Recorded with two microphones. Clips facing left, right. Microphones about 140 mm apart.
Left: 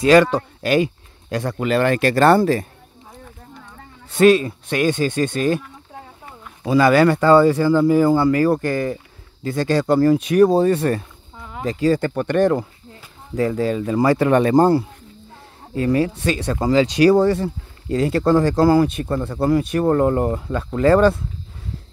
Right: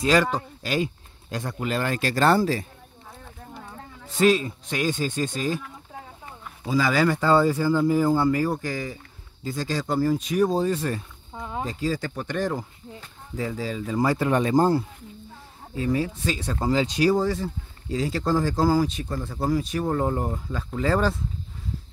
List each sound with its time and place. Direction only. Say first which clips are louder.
0.0 s speech: left 8 dB; 70° left (ahead or behind)
4.1 s speech: left 7 dB; 60° left (ahead or behind)
6.6 s speech: left 8 dB; 65° left (ahead or behind)
11.3 s a sound: right 3 dB; 25° right (ahead or behind)
11.6 s speech: left 10 dB; 75° left (ahead or behind)